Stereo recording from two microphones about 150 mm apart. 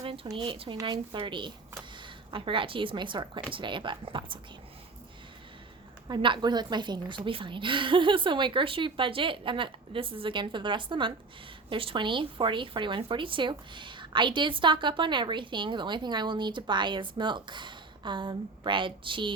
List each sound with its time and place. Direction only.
0.0 s speech: 40° right (ahead or behind)
6.1 s speech: 30° right (ahead or behind)